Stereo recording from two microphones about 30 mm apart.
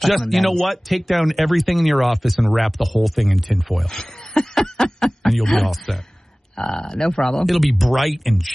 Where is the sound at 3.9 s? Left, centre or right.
Centre.